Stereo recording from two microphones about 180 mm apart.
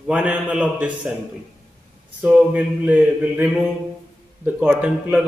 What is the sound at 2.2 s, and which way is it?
A man's voice, 5° right (ahead or behind).